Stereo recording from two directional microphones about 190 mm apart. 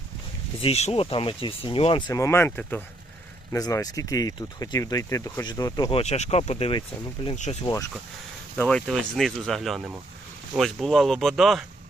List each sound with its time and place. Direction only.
0.6 s speech: 35° left (ahead or behind)
6.0 s speech: 35° left (ahead or behind)
8.5 s speech: 5° left (ahead or behind)